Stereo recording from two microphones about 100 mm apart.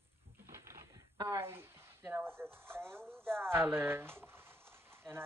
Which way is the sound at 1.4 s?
25° right (ahead or behind).